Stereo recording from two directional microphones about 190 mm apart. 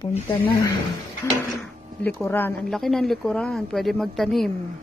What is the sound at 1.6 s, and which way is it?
Speech, 10° left (ahead or behind).